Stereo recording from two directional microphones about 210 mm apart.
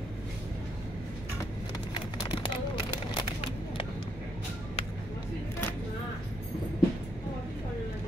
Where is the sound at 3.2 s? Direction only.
25° left (ahead or behind).